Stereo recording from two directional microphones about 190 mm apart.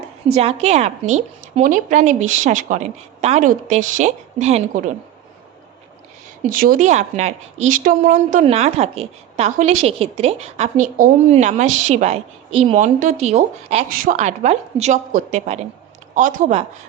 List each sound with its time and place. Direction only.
0.3 s a woman's voice: 35° right (ahead or behind)
6.5 s a woman's voice: 45° right (ahead or behind)
13.9 s a woman's voice: 45° right (ahead or behind)